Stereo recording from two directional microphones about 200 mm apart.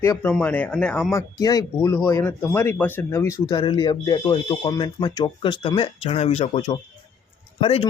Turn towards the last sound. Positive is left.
turn(degrees=25)  # may be behind; listen again after turning